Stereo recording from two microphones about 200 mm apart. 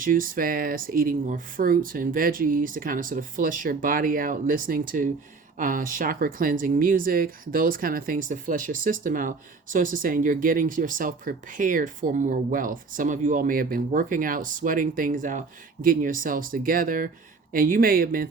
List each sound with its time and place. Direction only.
0.0 s speech: 45° right (ahead or behind)